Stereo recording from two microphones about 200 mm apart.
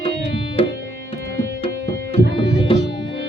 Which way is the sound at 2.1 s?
25° left (ahead or behind).